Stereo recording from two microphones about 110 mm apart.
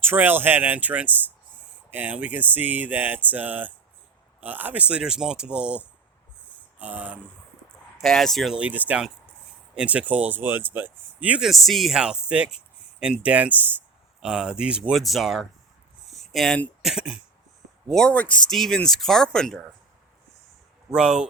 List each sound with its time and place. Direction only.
0.0 s speech: 20° right (ahead or behind)
6.7 s a sound: 15° right (ahead or behind)
8.0 s speech: 5° left (ahead or behind)
8.5 s speech: 15° right (ahead or behind)
11.6 s speech: centre (ahead or behind)
16.0 s a sound: centre (ahead or behind)
16.8 s speech: 5° right (ahead or behind)
17.8 s speech: 5° left (ahead or behind)
20.9 s speech: 5° right (ahead or behind)